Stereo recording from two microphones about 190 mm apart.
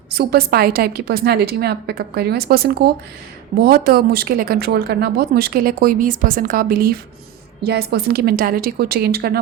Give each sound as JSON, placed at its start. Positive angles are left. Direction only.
{"t": 0.1, "sound": "a woman's voice", "side_deg": -55}